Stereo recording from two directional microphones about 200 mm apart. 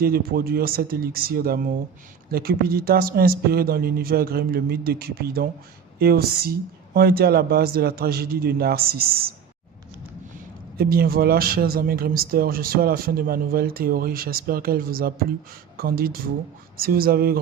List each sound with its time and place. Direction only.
0.0 s speech: 50° right (ahead or behind)
10.8 s speech: 50° right (ahead or behind)